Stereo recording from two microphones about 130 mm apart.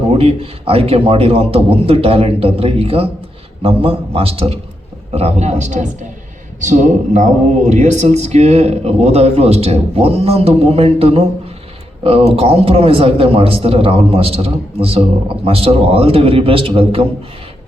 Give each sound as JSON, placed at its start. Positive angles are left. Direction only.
{"t": 0.1, "sound": "a man's voice", "side_deg": -45}
{"t": 12.4, "sound": "a man's voice", "side_deg": -45}